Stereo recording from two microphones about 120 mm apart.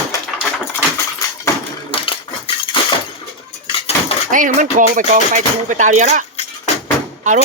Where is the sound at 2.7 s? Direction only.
45° left (ahead or behind).